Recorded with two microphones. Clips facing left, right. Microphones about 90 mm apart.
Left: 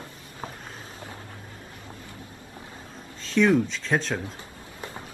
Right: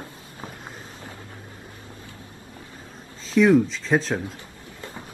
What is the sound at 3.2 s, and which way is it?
Speech, centre (ahead or behind).